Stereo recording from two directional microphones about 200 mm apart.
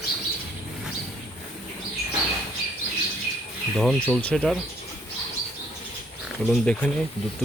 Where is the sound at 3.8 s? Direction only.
5° left (ahead or behind).